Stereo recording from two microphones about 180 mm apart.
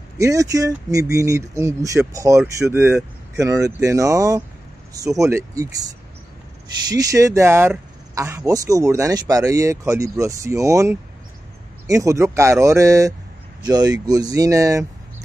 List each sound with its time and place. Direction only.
0.2 s speech: 20° right (ahead or behind)
6.9 s speech: 20° right (ahead or behind)